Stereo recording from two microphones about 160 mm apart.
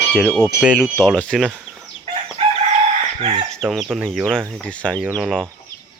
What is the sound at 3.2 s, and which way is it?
Chicken, 35° right (ahead or behind).